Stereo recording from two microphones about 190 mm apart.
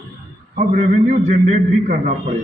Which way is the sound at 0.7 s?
40° right (ahead or behind).